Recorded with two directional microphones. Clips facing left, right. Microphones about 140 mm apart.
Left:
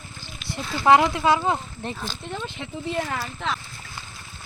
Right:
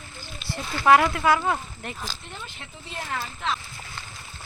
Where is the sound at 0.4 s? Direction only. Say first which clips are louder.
Left 1 dB; 15° left (ahead or behind).